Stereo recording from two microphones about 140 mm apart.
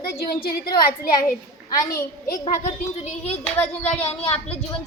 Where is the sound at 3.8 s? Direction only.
50° left (ahead or behind).